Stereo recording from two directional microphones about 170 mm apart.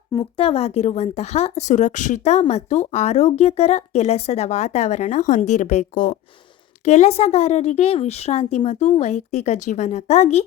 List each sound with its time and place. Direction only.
0.1 s speech: 30° left (ahead or behind)